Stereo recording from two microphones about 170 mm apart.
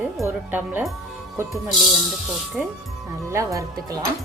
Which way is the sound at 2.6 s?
Centre (ahead or behind).